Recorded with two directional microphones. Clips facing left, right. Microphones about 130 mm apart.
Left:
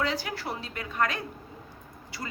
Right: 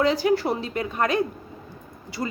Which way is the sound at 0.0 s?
20° right (ahead or behind).